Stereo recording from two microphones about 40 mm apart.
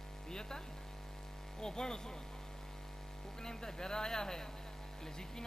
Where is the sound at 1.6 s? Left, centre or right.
Centre.